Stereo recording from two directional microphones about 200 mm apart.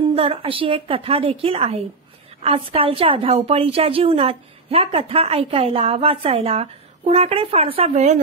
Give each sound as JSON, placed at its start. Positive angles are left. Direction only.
{"t": 0.1, "sound": "a woman's voice", "side_deg": -30}